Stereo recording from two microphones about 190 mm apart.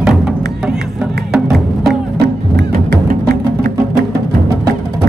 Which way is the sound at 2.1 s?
60° right (ahead or behind).